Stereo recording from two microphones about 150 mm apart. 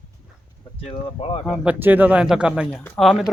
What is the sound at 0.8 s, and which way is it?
Speech, 40° left (ahead or behind).